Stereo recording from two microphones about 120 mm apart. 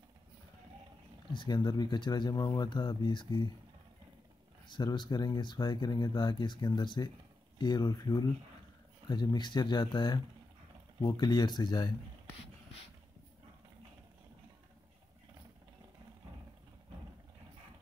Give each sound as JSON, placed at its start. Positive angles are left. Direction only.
{"t": 1.3, "sound": "speech", "side_deg": 40}
{"t": 4.6, "sound": "speech", "side_deg": 35}